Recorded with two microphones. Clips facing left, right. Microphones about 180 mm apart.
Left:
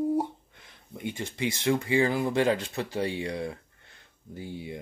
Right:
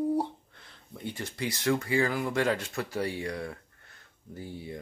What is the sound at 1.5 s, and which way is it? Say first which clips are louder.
Speech: left 2 dB; 20° left (ahead or behind).